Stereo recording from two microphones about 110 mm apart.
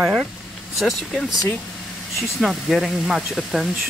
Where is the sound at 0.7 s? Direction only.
Centre (ahead or behind).